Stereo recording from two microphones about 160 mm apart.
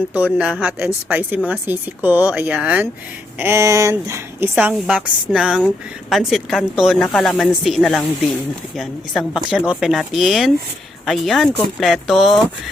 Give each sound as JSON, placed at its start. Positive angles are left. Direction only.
{"t": 0.3, "sound": "speech", "side_deg": -5}
{"t": 4.5, "sound": "speech", "side_deg": -5}